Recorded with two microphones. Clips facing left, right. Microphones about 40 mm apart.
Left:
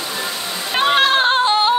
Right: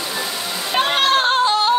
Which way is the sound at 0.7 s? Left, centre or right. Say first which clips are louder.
Left 2 dB; centre.